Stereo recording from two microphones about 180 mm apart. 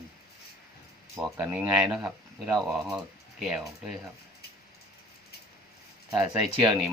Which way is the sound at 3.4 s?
Centre (ahead or behind).